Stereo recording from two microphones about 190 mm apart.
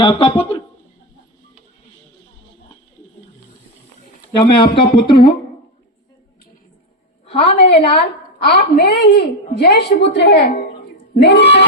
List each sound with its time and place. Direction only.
0.0 s speech: 25° left (ahead or behind)
4.4 s speech: 25° left (ahead or behind)
7.3 s a woman's voice: 30° left (ahead or behind)
7.9 s a woman's voice: 55° left (ahead or behind)